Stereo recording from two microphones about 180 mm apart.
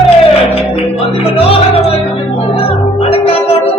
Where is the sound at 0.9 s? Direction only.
30° left (ahead or behind).